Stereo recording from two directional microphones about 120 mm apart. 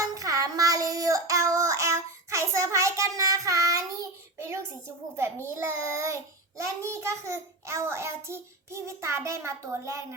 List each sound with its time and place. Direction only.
0.0 s child singing: 30° right (ahead or behind)
4.4 s a sound: 25° right (ahead or behind)
5.5 s a child's voice: 20° right (ahead or behind)